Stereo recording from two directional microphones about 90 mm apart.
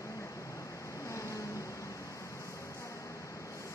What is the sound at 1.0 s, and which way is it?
Vehicle, 35° left (ahead or behind).